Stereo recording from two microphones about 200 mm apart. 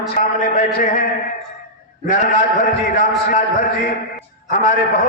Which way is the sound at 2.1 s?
40° left (ahead or behind).